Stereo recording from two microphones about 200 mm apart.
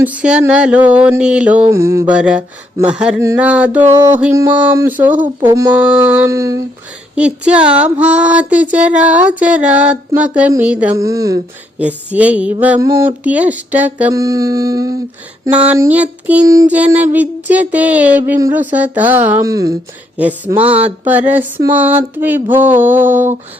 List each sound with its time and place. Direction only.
0.0 s a sound: 5° right (ahead or behind)
1.7 s female singing: 15° right (ahead or behind)
7.2 s female singing: 5° right (ahead or behind)